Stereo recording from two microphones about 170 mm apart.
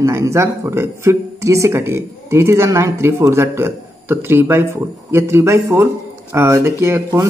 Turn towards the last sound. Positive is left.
turn(degrees=-15)  # may be behind; listen again after turning